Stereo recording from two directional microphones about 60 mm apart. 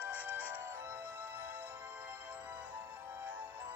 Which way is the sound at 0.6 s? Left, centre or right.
Right.